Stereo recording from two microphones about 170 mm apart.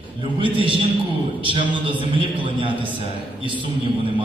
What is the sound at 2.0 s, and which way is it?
Speech, 30° right (ahead or behind).